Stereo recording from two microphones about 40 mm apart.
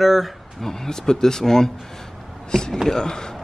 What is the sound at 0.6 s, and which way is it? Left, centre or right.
Speech, centre.